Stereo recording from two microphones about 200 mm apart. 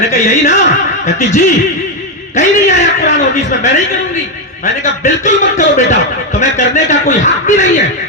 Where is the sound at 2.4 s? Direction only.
40° left (ahead or behind).